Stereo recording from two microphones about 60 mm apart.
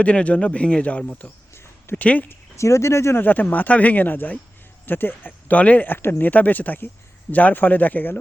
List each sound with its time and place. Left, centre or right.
0.0 s speech: left
2.6 s speech: left
3.2 s speech: left